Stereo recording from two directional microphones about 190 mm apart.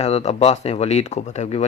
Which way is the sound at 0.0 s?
35° left (ahead or behind).